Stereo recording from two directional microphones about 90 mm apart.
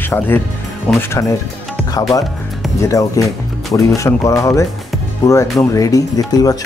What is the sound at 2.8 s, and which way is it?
Speech, 35° left (ahead or behind).